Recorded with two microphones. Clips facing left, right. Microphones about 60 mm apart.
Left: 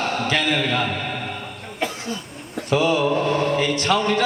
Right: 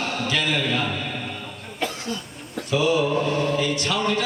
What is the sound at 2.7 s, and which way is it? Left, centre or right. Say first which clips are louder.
A man's voice: left 2 dB; left.